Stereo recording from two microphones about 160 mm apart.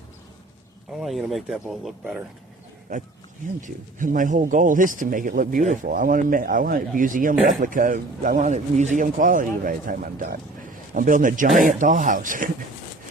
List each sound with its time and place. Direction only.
0.9 s speech: centre (ahead or behind)
3.6 s speech: 55° right (ahead or behind)